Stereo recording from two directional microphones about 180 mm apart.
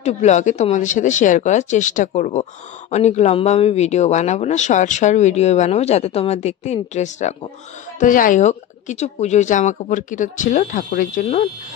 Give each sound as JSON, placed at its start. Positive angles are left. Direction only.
{"t": 0.0, "sound": "speech", "side_deg": 40}